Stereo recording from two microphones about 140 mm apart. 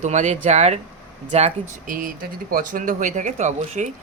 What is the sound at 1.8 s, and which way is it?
Speech, 90° right.